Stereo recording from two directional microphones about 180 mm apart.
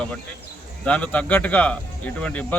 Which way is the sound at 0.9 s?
5° left (ahead or behind).